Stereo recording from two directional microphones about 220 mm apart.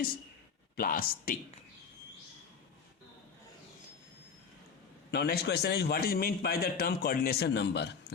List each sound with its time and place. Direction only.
0.8 s a man's voice: 40° left (ahead or behind)
5.1 s a man's voice: 45° left (ahead or behind)